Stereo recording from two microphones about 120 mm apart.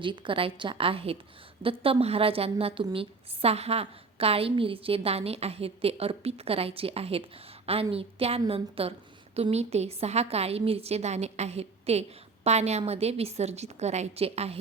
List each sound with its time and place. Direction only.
0.0 s a woman's voice: 45° right (ahead or behind)